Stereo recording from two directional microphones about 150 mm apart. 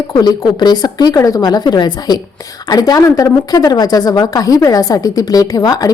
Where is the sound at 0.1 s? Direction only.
30° left (ahead or behind).